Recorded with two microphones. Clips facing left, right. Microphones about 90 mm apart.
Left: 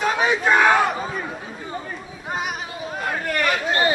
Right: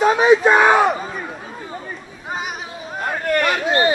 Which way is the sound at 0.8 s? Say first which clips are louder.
Right 4 dB; centre (ahead or behind).